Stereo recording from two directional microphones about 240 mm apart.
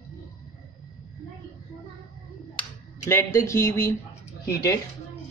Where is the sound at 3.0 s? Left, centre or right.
Centre.